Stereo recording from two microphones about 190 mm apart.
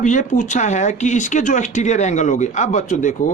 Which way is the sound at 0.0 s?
40° left (ahead or behind).